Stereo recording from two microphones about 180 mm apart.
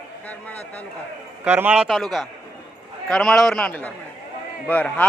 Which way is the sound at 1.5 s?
10° right (ahead or behind).